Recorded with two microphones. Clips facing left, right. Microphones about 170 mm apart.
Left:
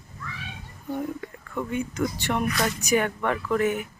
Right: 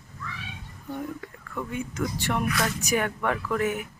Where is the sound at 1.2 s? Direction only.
5° left (ahead or behind).